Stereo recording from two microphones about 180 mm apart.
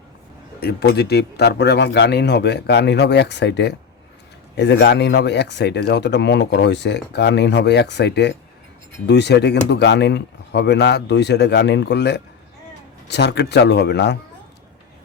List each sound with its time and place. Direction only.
0.6 s speech: 65° left (ahead or behind)